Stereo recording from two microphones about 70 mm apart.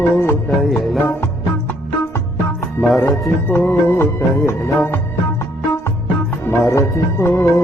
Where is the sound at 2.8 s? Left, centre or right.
Left.